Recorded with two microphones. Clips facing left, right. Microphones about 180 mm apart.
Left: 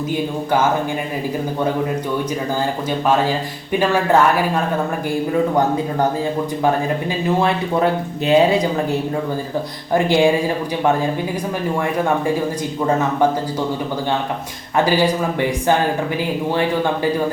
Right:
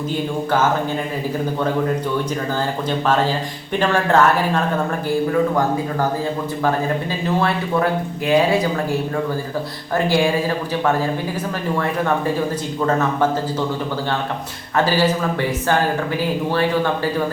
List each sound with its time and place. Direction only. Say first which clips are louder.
3.1 s speech: left 2 dB; 10° left (ahead or behind)
8.3 s speech: left 2 dB; 20° left (ahead or behind)
14.8 s speech: left 1 dB; 15° left (ahead or behind)